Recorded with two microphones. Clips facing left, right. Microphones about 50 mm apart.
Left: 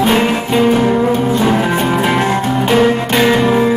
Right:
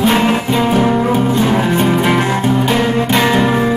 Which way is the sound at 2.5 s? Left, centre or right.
Centre.